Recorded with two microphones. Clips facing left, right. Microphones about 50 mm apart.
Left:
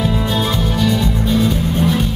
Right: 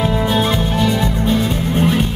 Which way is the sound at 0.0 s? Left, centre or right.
Right.